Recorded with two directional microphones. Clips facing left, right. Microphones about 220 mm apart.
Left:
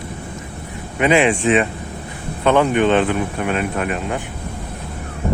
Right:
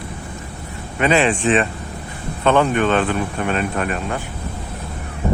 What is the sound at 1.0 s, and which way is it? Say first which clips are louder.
Speech: left 2 dB; 15° left (ahead or behind).